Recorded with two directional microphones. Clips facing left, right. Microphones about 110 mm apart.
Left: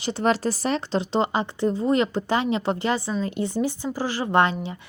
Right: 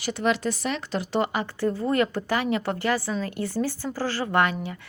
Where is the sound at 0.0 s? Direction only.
35° left (ahead or behind).